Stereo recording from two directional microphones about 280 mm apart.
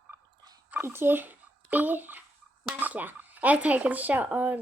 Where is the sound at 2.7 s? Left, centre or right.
Centre.